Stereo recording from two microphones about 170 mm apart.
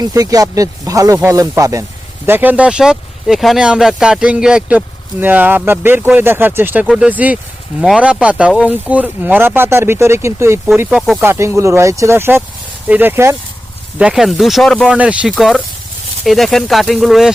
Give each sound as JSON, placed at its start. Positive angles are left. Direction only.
{"t": 0.0, "sound": "speech", "side_deg": -20}
{"t": 10.8, "sound": "speech", "side_deg": -5}
{"t": 11.3, "sound": "speech", "side_deg": -15}
{"t": 14.0, "sound": "speech", "side_deg": -5}